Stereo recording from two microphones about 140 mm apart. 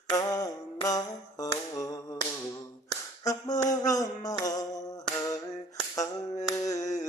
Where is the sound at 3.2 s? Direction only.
25° left (ahead or behind).